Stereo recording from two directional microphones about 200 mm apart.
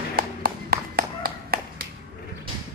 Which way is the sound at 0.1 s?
50° right (ahead or behind).